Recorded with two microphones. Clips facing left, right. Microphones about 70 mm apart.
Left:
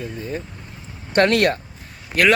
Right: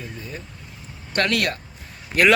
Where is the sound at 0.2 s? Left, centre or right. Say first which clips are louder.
Left 7 dB; left.